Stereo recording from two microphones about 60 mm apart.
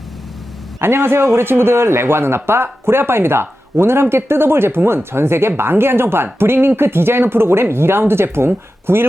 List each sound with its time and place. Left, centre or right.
0.8 s a man's voice: right